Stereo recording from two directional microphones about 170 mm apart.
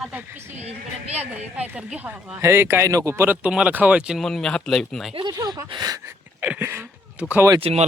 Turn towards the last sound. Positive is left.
turn(degrees=-35)  # may be behind; listen again after turning